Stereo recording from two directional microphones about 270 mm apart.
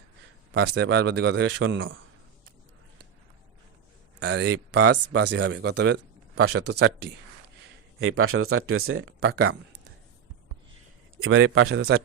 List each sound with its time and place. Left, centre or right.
0.5 s speech: right
4.2 s speech: right
7.9 s speech: right
11.2 s speech: right